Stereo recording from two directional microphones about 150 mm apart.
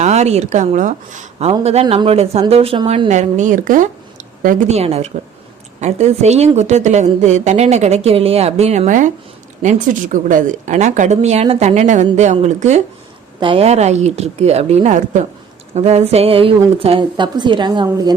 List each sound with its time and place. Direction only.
0.0 s a woman's voice: 50° right (ahead or behind)
4.8 s a woman's voice: 45° right (ahead or behind)
13.4 s a woman's voice: 40° right (ahead or behind)